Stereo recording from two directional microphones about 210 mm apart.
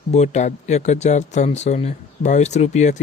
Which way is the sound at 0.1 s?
35° left (ahead or behind).